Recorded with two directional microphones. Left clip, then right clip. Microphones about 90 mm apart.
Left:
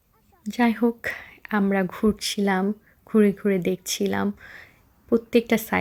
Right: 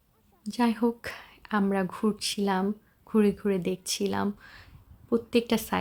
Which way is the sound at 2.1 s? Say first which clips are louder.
Left 4 dB; 40° left (ahead or behind).